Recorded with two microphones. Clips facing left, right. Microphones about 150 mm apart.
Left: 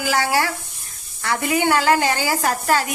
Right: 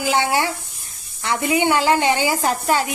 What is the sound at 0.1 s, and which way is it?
A woman's voice, 25° right (ahead or behind).